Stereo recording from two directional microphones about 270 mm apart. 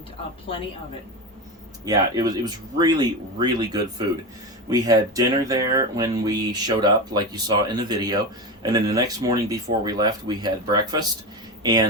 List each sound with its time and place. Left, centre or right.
0.5 s a woman's voice: centre
1.8 s speech: centre